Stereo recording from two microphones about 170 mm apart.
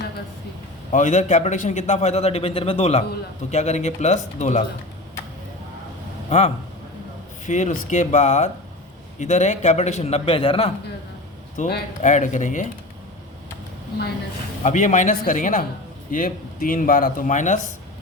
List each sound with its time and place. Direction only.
0.9 s a man's voice: 45° left (ahead or behind)
7.4 s a man's voice: 45° left (ahead or behind)
11.6 s speech: 45° left (ahead or behind)
14.6 s speech: 45° left (ahead or behind)